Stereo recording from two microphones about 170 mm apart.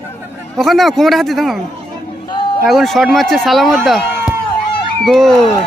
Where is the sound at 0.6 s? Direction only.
Centre (ahead or behind).